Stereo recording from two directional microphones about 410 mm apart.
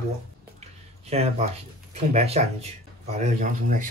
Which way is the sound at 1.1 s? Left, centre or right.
Centre.